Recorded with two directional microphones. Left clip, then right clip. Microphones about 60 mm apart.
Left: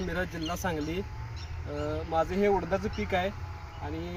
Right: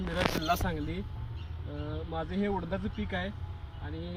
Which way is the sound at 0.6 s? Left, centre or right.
Left.